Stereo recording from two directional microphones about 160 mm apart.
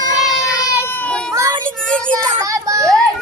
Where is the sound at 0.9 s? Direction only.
10° left (ahead or behind).